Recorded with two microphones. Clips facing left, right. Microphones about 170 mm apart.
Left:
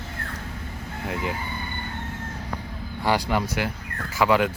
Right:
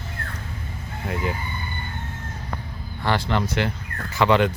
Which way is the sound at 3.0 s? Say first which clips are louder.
Even; 15° left (ahead or behind).